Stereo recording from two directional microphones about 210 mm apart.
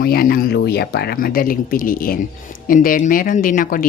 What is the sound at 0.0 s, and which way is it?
Speech, 45° left (ahead or behind).